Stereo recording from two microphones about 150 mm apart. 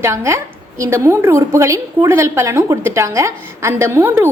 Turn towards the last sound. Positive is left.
turn(degrees=-15)  # may be behind; listen again after turning